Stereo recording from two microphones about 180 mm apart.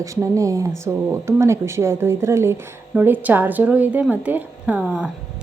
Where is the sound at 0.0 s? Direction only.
15° right (ahead or behind).